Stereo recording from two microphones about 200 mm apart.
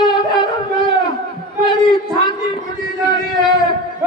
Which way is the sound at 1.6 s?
20° left (ahead or behind).